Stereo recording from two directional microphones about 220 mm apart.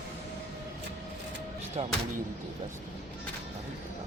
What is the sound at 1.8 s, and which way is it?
Speech, 25° right (ahead or behind).